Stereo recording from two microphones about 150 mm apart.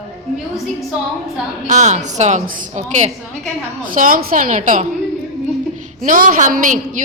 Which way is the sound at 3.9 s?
65° right (ahead or behind).